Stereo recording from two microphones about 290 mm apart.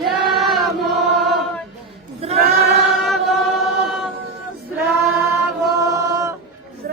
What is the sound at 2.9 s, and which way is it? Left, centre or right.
Chant, centre.